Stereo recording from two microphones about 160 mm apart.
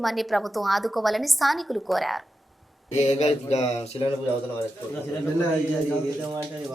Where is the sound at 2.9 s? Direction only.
45° left (ahead or behind).